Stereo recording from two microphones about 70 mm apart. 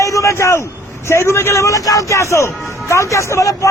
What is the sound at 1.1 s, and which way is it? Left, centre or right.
A man's voice, left.